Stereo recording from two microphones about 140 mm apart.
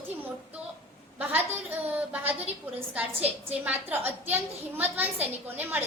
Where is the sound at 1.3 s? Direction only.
15° right (ahead or behind).